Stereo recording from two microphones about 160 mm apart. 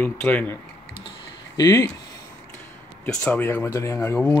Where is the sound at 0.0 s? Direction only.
10° left (ahead or behind).